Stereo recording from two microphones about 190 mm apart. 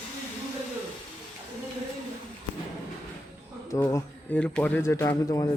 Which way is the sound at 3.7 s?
15° left (ahead or behind).